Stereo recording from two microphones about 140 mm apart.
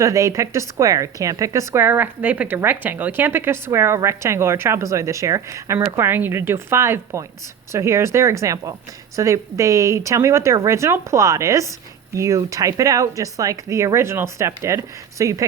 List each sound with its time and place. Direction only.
0.0 s speech: 20° right (ahead or behind)